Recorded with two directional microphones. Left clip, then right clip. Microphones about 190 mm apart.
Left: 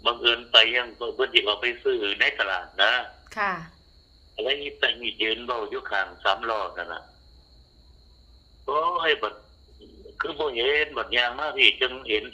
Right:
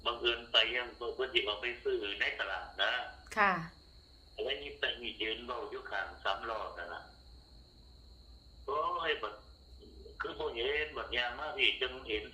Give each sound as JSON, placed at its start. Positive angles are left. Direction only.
{"t": 0.0, "sound": "a man's voice", "side_deg": 60}
{"t": 3.2, "sound": "speech", "side_deg": 10}
{"t": 4.4, "sound": "a man's voice", "side_deg": 65}
{"t": 8.6, "sound": "a man's voice", "side_deg": 65}